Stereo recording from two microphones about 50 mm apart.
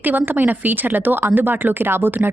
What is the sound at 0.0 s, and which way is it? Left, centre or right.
Speech, right.